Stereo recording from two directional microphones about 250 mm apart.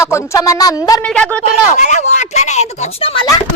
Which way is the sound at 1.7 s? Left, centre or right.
Left.